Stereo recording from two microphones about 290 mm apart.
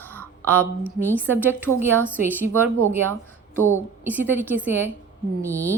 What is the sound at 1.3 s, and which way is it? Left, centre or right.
A woman's voice, centre.